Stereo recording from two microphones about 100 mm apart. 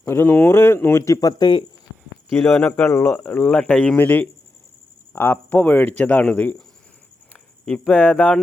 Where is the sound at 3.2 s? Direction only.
15° left (ahead or behind).